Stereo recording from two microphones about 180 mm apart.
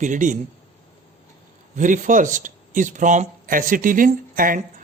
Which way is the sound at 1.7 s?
45° right (ahead or behind).